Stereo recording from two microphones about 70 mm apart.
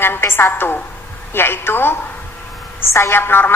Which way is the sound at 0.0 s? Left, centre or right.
Left.